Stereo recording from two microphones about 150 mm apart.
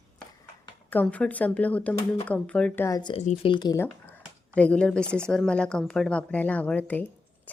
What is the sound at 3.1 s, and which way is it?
Speech, 40° left (ahead or behind).